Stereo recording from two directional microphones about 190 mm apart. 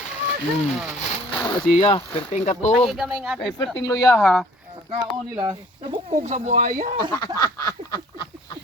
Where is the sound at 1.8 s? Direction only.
30° left (ahead or behind).